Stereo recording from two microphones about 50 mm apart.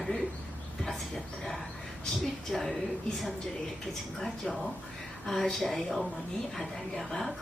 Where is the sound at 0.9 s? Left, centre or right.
Centre.